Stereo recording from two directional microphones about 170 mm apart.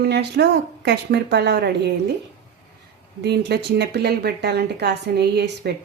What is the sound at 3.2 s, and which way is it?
Speech, 80° right.